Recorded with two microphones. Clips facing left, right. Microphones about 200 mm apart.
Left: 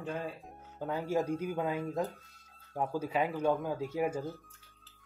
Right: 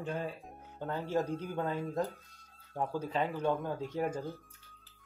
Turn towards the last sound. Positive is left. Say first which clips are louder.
# left 2 dB
turn(degrees=10)  # may be behind; listen again after turning